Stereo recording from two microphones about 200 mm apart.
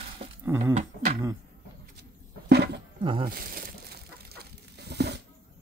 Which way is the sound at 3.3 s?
45° right (ahead or behind).